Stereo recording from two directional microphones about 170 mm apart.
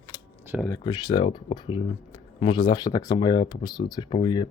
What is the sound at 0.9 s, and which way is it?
Speech, 25° left (ahead or behind).